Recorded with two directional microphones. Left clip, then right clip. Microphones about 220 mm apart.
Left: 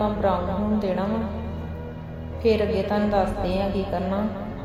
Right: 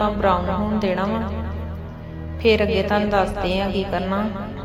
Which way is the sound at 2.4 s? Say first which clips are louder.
Right 4 dB; 10° right (ahead or behind).